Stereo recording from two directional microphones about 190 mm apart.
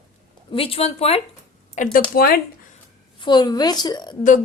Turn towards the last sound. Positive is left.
turn(degrees=20)  # may be behind; listen again after turning